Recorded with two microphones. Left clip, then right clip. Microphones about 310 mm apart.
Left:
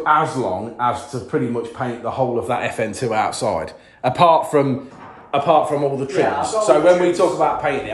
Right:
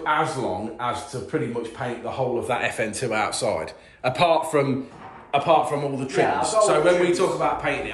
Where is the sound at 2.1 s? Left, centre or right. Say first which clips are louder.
Left 5 dB; left.